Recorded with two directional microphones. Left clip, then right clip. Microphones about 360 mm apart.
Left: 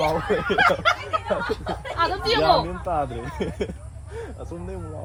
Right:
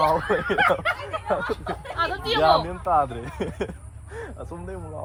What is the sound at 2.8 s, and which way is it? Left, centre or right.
Speech, centre.